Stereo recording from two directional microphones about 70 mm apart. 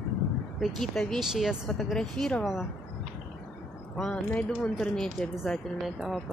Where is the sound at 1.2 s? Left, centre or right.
Centre.